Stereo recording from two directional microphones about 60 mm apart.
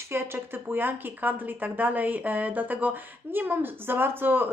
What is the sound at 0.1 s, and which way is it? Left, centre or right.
Speech, right.